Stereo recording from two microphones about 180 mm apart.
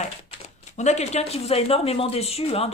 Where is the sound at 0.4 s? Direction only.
40° left (ahead or behind).